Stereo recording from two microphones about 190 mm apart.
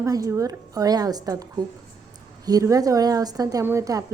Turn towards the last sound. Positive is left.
turn(degrees=-15)  # may be behind; listen again after turning